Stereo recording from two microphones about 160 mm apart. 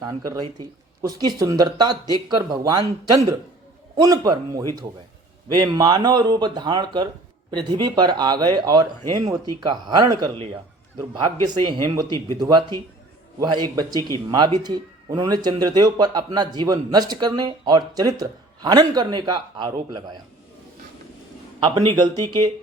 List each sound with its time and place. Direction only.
0.0 s speech: 25° right (ahead or behind)
21.6 s speech: 25° right (ahead or behind)